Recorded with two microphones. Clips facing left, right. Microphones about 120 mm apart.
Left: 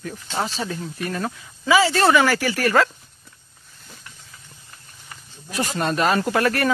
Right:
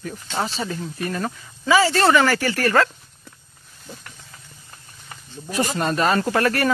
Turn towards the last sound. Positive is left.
turn(degrees=0)  # may be behind; listen again after turning